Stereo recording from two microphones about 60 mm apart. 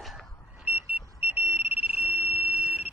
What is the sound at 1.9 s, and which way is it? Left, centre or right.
Fire alarm, centre.